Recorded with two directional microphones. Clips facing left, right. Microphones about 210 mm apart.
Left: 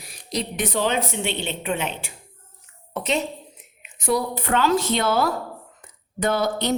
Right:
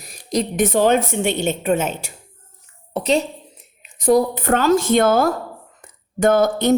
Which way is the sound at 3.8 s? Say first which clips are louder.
Right 8 dB; 40° right (ahead or behind).